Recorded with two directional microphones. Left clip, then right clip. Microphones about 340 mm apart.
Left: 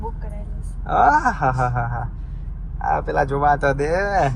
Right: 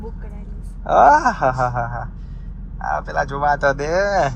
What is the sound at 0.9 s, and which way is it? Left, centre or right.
Speech, centre.